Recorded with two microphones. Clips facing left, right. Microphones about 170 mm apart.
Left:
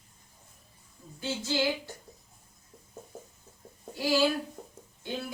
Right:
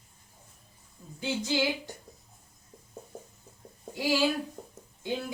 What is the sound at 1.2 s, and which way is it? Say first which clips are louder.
Speech: right 1 dB; 15° right (ahead or behind).